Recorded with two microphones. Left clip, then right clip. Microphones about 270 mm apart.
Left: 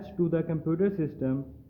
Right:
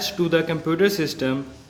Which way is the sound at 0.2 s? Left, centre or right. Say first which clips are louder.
Right 7 dB; centre.